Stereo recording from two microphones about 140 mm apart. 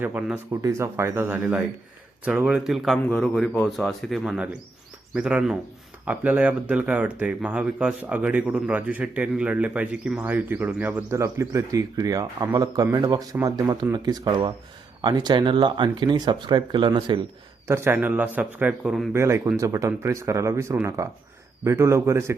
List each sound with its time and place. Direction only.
0.0 s speech: 10° right (ahead or behind); by 17.2 s 35° right (ahead or behind)
17.7 s speech: 20° right (ahead or behind)
19.1 s speech: 20° right (ahead or behind)